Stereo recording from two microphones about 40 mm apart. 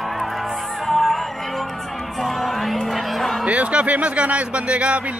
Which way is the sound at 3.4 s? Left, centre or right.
Right.